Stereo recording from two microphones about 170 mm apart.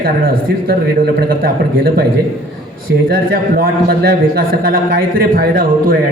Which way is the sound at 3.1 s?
60° right (ahead or behind).